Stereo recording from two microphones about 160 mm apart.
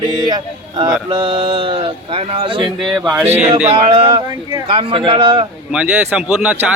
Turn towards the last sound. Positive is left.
turn(degrees=-5)  # may be behind; listen again after turning